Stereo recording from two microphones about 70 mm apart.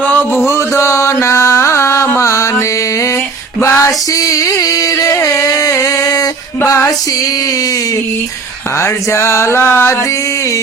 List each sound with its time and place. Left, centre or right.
0.0 s music: left
0.4 s mantra: left
3.6 s a sound: left
4.2 s music: left
6.7 s female singing: left
8.8 s mantra: left
9.6 s music: left